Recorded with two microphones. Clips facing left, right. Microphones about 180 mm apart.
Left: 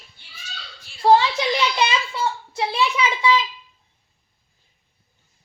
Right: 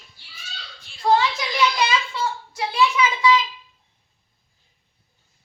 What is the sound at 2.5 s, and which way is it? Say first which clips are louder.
Speech: right 3 dB; 30° left (ahead or behind).